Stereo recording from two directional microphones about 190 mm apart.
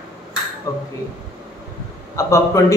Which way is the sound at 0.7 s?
15° left (ahead or behind).